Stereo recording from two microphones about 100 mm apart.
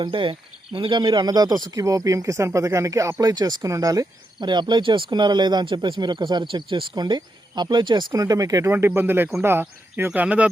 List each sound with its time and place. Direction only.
0.0 s speech: 60° right (ahead or behind); by 4.0 s 35° right (ahead or behind)
4.4 s speech: 50° right (ahead or behind)
8.1 s speech: 35° right (ahead or behind); by 10.5 s 10° right (ahead or behind)